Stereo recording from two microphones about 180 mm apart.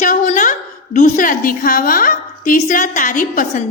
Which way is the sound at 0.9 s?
45° left (ahead or behind).